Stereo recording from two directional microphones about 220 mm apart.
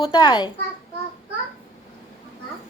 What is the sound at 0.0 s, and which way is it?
Speech, 20° left (ahead or behind).